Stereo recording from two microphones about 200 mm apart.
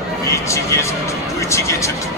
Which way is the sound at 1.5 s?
15° left (ahead or behind).